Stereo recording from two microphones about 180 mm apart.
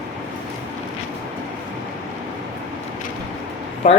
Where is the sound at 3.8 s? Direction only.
35° left (ahead or behind).